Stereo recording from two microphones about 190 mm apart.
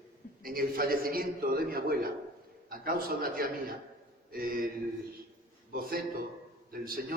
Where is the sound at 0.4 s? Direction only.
50° right (ahead or behind).